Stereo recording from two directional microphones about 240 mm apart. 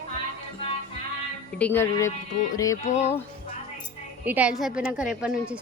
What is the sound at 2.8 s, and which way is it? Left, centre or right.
Music, left.